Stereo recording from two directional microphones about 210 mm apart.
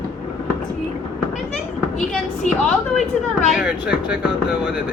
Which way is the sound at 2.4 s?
35° left (ahead or behind).